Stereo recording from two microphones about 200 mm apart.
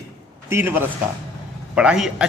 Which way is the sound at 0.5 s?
10° right (ahead or behind).